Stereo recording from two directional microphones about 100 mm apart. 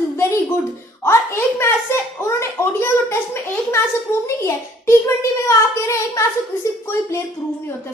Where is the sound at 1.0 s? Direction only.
25° left (ahead or behind).